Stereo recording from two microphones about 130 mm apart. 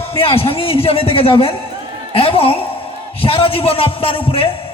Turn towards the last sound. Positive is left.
turn(degrees=45)  # may be behind; listen again after turning